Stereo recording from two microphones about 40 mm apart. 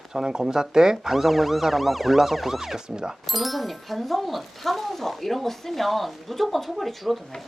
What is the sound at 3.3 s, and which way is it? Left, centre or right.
Speech, centre.